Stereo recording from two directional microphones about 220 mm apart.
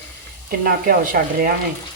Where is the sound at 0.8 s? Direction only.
40° right (ahead or behind).